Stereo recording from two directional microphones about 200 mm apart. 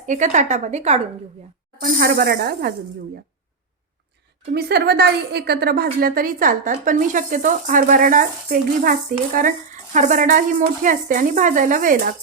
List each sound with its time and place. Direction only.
0.0 s speech: 35° right (ahead or behind)
1.8 s a woman's voice: 50° right (ahead or behind)
4.5 s a woman's voice: 55° right (ahead or behind)